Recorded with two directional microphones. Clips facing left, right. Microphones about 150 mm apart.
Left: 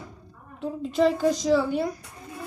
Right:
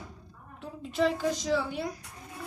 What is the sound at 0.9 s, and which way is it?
Speech, 35° left (ahead or behind).